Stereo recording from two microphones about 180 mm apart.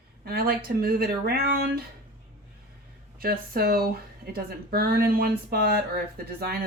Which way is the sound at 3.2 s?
55° right (ahead or behind).